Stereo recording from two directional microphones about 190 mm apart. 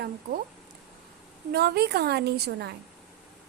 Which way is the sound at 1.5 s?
55° right (ahead or behind).